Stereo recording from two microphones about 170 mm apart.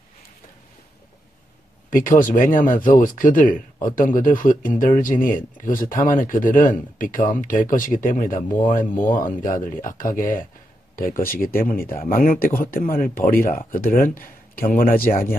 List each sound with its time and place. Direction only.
1.9 s a man's voice: 55° left (ahead or behind)